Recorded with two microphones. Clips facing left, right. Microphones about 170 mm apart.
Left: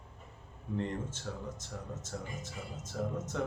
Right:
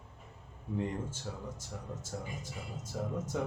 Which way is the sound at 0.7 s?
10° right (ahead or behind).